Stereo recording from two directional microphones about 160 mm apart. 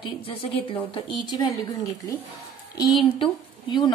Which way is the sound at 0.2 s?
35° left (ahead or behind).